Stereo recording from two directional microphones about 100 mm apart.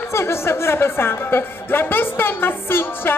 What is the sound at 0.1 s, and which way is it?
A woman's voice, 25° left (ahead or behind).